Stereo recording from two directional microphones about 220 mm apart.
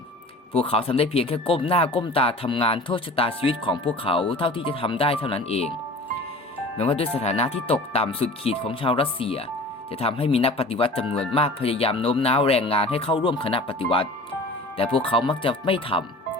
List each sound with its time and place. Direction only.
0.5 s speech: 25° left (ahead or behind)
6.7 s speech: 25° left (ahead or behind)